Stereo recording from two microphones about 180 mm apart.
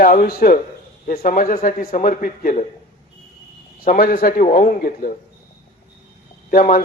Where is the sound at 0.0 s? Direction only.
50° left (ahead or behind).